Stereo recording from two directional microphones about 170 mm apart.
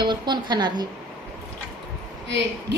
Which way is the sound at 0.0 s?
25° right (ahead or behind).